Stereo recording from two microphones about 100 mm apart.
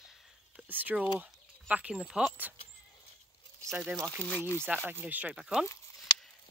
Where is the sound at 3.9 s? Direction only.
5° left (ahead or behind).